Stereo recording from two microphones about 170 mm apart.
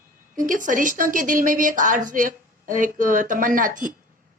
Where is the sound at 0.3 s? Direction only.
50° right (ahead or behind).